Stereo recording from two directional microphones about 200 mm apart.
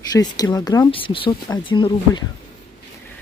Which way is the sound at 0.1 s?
20° left (ahead or behind).